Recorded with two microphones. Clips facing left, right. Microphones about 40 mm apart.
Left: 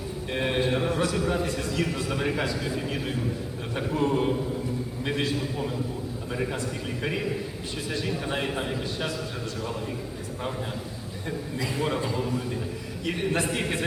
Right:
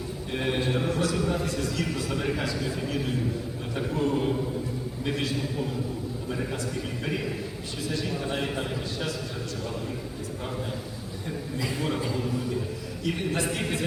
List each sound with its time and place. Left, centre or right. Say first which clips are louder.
0.3 s mantra: left 2 dB; centre
1.1 s a man's voice: left 1 dB; centre
1.5 s a man's voice: even; left
1.8 s a man's voice: left 1 dB; centre
3.9 s a sound: left 2 dB; centre
5.0 s a sound: left 1 dB; left
8.1 s a man's voice: left 1 dB; centre
11.6 s a man's voice: left 2 dB; centre
13.5 s a man's voice: left 1 dB; centre